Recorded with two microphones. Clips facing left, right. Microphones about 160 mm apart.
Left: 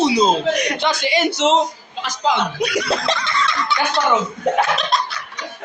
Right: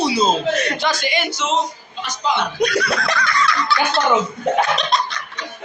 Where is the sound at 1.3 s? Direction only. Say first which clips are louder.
Left 8 dB; 80° left.